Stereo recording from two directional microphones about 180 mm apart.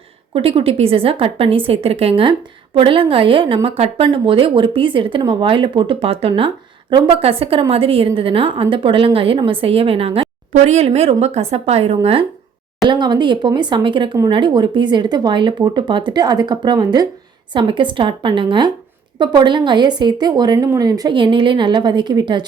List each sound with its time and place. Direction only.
0.3 s a woman's voice: 30° right (ahead or behind)